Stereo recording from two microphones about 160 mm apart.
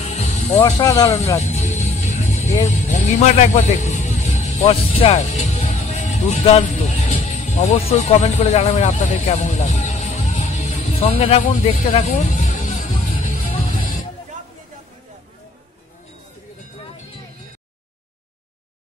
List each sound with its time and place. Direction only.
0.1 s music: 45° left (ahead or behind)
0.6 s speech: 25° left (ahead or behind)
1.5 s music: 45° left (ahead or behind)
2.6 s a man's voice: 50° left (ahead or behind)
7.2 s music: 45° left (ahead or behind)